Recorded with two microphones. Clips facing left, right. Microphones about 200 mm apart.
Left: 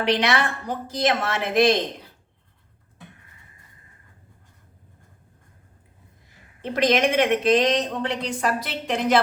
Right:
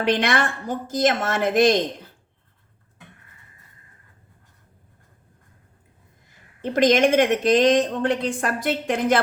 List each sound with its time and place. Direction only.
0.0 s a woman's voice: 50° right (ahead or behind)
6.7 s a woman's voice: 45° right (ahead or behind)